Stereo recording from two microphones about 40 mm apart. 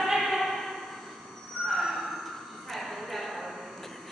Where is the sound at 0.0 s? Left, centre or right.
Centre.